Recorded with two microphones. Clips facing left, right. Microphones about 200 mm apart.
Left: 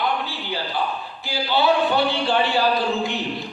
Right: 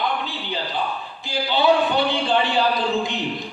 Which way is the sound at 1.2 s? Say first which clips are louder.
Right 1 dB; 20° right (ahead or behind).